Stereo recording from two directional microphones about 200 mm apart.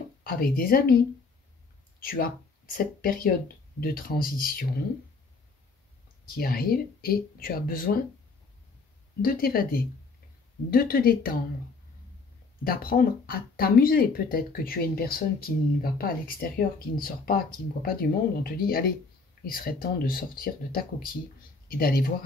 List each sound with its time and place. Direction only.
0.2 s speech: 45° left (ahead or behind)
6.3 s speech: 45° left (ahead or behind)
9.2 s speech: 45° left (ahead or behind)
12.6 s speech: 45° left (ahead or behind)